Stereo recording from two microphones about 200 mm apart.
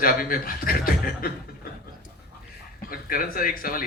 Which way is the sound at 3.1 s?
45° left (ahead or behind).